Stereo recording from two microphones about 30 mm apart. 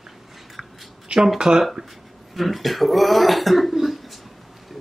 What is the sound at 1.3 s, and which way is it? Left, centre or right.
Speech, right.